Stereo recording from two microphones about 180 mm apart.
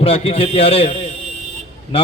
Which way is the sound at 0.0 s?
30° left (ahead or behind).